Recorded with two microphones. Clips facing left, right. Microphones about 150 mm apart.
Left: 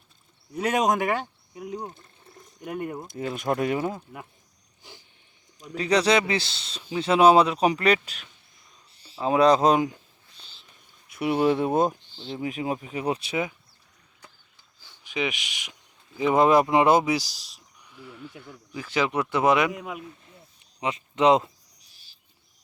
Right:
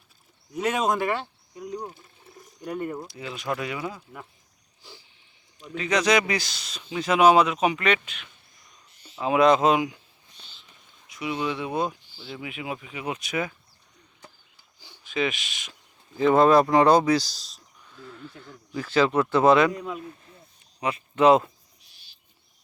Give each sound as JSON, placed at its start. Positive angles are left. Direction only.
{"t": 0.9, "sound": "speech", "side_deg": 15}
{"t": 2.7, "sound": "speech", "side_deg": 10}
{"t": 3.1, "sound": "speech", "side_deg": 50}
{"t": 4.8, "sound": "a sound", "side_deg": 20}
{"t": 5.5, "sound": "speech", "side_deg": 40}
{"t": 10.3, "sound": "whispering", "side_deg": 30}
{"t": 11.1, "sound": "speech", "side_deg": 55}
{"t": 12.1, "sound": "speech", "side_deg": 20}
{"t": 12.4, "sound": "speech", "side_deg": 40}
{"t": 15.0, "sound": "speech", "side_deg": 15}